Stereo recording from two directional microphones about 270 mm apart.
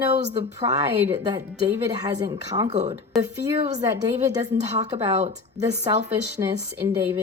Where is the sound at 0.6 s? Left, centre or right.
Centre.